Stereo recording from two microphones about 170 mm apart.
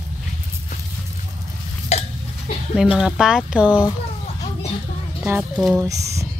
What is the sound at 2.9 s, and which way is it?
Speech, 5° right (ahead or behind).